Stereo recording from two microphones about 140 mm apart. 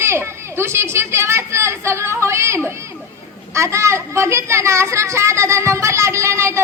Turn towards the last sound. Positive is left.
turn(degrees=-20)  # may be behind; listen again after turning